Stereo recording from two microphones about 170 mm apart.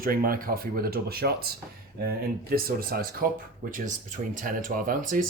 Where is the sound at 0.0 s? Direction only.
60° right (ahead or behind).